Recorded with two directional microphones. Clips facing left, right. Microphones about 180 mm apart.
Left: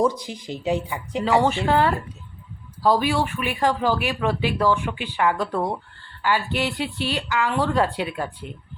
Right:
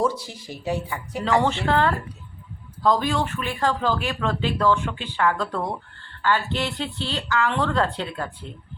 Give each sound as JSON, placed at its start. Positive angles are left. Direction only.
{"t": 0.0, "sound": "speech", "side_deg": 15}